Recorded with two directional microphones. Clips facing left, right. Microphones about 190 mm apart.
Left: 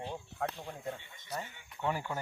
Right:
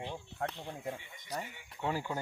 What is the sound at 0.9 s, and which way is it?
Speech, 15° right (ahead or behind).